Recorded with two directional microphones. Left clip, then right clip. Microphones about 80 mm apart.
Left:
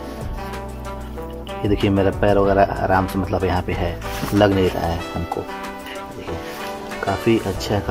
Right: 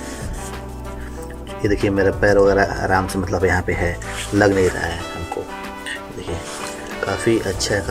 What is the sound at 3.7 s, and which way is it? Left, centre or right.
Speech, centre.